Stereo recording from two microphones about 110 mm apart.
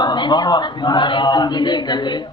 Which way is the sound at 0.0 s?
40° left (ahead or behind).